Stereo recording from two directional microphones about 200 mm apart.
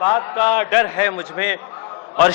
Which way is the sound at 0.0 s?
20° left (ahead or behind).